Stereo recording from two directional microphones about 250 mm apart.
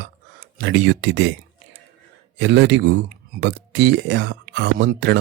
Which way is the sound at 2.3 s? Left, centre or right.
Right.